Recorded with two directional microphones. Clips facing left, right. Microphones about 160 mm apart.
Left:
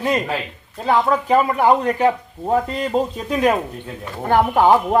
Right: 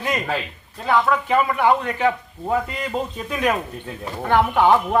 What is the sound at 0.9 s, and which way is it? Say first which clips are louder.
Speech: left 2 dB; 35° left (ahead or behind).